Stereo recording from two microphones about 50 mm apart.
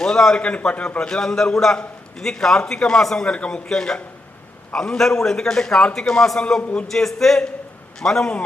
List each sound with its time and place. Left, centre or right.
0.0 s a man's voice: centre
3.2 s a man's voice: left
6.6 s a man's voice: left
6.8 s a man's voice: centre